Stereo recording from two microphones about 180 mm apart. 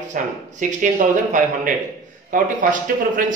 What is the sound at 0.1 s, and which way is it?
A man's voice, 45° right (ahead or behind).